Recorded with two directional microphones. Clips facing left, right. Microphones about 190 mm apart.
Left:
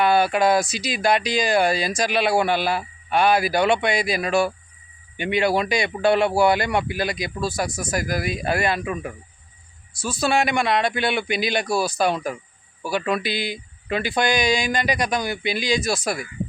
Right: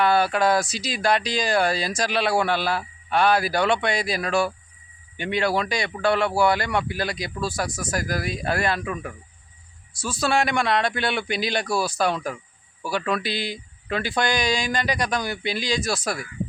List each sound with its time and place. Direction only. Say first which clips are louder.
0.0 s speech: left 2 dB; 15° left (ahead or behind)
10.2 s speech: left 1 dB; 15° left (ahead or behind)